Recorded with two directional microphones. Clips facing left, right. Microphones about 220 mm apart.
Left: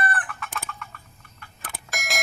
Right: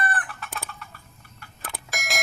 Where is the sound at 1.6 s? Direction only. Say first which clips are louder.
Even; centre (ahead or behind).